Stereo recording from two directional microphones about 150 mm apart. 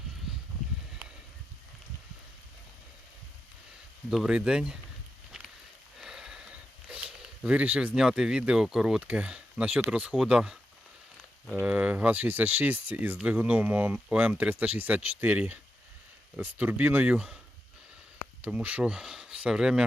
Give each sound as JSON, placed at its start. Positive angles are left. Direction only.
{"t": 4.1, "sound": "speech", "side_deg": -5}
{"t": 6.0, "sound": "speech", "side_deg": -5}
{"t": 11.6, "sound": "speech", "side_deg": -10}
{"t": 18.4, "sound": "speech", "side_deg": -10}